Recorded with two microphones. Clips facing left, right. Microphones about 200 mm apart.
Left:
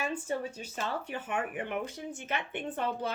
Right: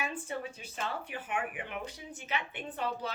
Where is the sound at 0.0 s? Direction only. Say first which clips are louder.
Left 4 dB; 40° left (ahead or behind).